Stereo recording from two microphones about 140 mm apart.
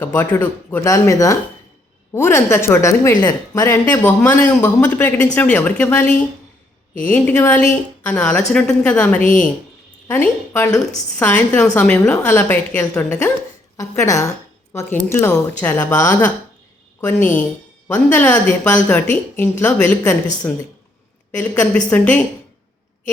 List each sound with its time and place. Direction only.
0.0 s a woman's voice: 10° left (ahead or behind)
21.3 s a woman's voice: 10° left (ahead or behind)